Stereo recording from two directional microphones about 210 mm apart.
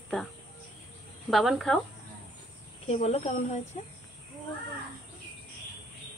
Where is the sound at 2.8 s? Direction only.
30° left (ahead or behind).